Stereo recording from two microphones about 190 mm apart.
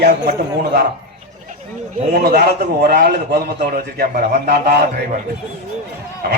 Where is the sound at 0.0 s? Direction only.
55° right (ahead or behind).